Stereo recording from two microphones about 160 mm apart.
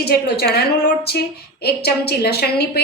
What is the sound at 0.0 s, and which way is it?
Speech, 85° left.